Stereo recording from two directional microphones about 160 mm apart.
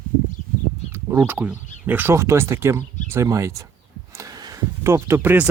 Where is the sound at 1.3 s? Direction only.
10° right (ahead or behind).